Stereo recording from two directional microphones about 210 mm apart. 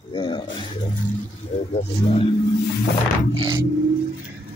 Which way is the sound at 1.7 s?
25° left (ahead or behind).